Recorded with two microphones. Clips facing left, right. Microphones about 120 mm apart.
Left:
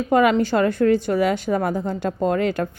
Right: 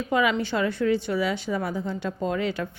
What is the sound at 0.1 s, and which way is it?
A woman's voice, 50° left (ahead or behind).